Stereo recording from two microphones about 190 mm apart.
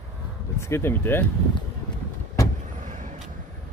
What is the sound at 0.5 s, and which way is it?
Speech, 15° left (ahead or behind).